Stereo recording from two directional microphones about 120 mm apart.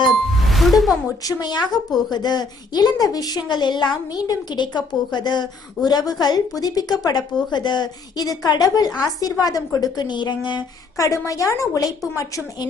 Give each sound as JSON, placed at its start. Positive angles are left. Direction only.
{"t": 0.0, "sound": "music", "side_deg": 0}
{"t": 1.2, "sound": "a woman's voice", "side_deg": 35}